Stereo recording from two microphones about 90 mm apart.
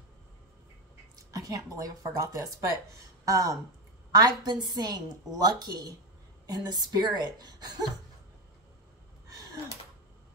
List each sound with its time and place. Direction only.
1.1 s a woman's voice: 40° right (ahead or behind)